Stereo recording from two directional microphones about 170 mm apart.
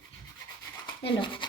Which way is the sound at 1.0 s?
30° left (ahead or behind).